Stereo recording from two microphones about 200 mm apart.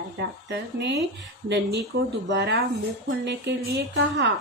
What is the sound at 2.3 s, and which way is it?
Speech, 60° right (ahead or behind).